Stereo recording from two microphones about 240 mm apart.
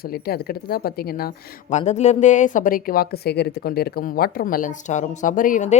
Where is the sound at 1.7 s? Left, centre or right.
Left.